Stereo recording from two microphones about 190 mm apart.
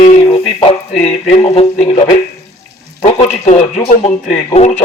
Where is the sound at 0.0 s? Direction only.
35° left (ahead or behind).